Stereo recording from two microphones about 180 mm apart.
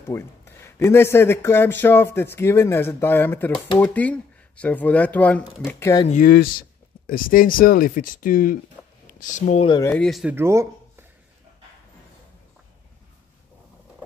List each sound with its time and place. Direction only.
0.1 s a man's voice: 15° left (ahead or behind)
6.0 s speech: 45° left (ahead or behind)
8.8 s a sound: centre (ahead or behind)
9.2 s speech: 45° left (ahead or behind)
9.7 s speech: 20° left (ahead or behind)
9.9 s speech: centre (ahead or behind)
10.3 s speech: 15° right (ahead or behind)